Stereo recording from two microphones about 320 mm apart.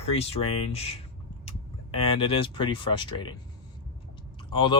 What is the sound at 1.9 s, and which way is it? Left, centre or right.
Speech, centre.